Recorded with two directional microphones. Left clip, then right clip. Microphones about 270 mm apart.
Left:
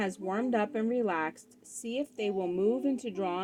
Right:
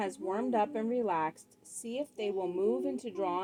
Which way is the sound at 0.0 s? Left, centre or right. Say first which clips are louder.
Left 1 dB; left.